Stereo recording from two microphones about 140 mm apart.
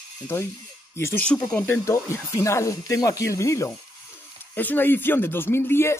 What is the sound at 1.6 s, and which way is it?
Speech, 20° left (ahead or behind).